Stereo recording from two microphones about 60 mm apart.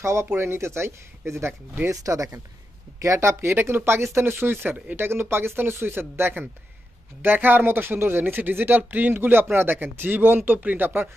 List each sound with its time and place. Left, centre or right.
0.0 s speech: right
1.9 s speech: right
3.0 s speech: right